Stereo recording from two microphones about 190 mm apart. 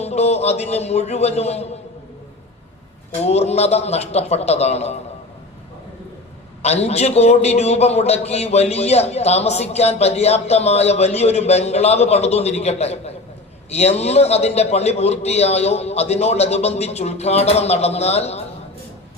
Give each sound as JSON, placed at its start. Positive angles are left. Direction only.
{"t": 0.0, "sound": "a man's voice", "side_deg": 35}
{"t": 3.2, "sound": "a man's voice", "side_deg": 35}
{"t": 6.6, "sound": "a man's voice", "side_deg": 35}